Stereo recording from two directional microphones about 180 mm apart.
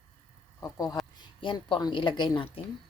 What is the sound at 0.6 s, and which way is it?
Speech, 20° left (ahead or behind).